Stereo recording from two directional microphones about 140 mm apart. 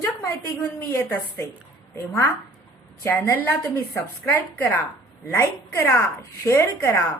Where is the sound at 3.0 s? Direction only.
15° left (ahead or behind).